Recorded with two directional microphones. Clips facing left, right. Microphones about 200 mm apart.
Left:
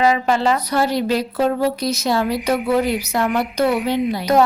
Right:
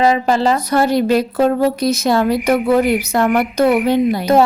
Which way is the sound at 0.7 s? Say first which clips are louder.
Right 5 dB; 50° right (ahead or behind).